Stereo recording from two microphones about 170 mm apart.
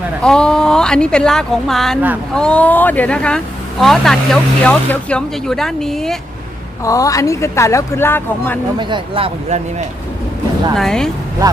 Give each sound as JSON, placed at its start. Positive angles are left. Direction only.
{"t": 0.2, "sound": "speech", "side_deg": 5}
{"t": 6.8, "sound": "speech", "side_deg": 20}
{"t": 8.8, "sound": "speech", "side_deg": -30}
{"t": 10.8, "sound": "speech", "side_deg": 5}